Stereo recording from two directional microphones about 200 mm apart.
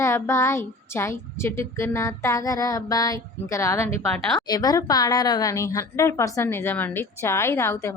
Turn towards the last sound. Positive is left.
turn(degrees=15)  # may be behind; listen again after turning